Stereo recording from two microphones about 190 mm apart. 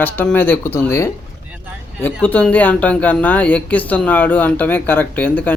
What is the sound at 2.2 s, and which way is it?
Speech, 10° left (ahead or behind).